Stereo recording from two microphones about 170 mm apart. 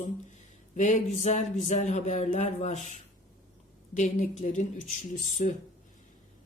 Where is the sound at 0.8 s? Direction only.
45° left (ahead or behind).